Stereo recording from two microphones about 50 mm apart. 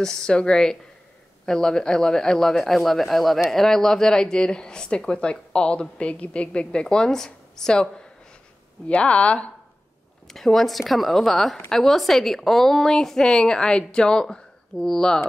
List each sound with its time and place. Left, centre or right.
0.0 s a woman's voice: centre
10.2 s a woman's voice: centre